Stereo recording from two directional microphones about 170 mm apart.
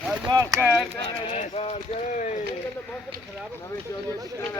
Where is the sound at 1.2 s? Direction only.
35° left (ahead or behind).